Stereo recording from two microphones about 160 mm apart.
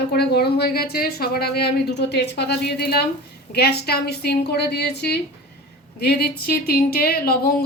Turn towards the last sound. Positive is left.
turn(degrees=70)  # may be behind; listen again after turning